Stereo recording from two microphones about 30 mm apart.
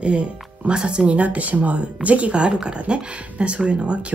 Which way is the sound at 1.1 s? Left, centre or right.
Right.